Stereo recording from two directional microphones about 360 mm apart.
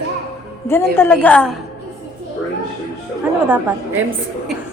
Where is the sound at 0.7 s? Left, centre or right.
Centre.